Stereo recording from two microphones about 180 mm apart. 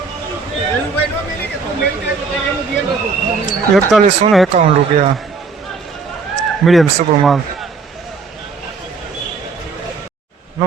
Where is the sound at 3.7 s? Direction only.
Centre (ahead or behind).